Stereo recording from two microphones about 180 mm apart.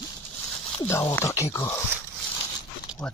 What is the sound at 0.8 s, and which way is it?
Speech, 20° left (ahead or behind).